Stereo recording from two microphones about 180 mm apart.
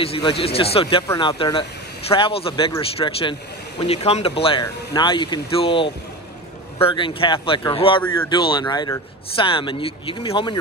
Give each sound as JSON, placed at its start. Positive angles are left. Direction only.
{"t": 0.0, "sound": "speech", "side_deg": 30}